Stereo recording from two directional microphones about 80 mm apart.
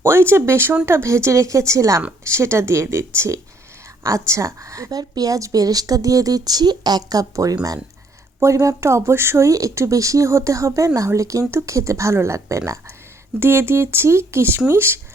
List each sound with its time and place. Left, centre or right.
0.0 s a woman's voice: right